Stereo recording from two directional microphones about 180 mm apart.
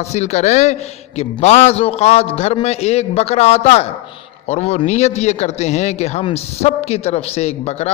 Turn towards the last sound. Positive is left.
turn(degrees=35)  # may be behind; listen again after turning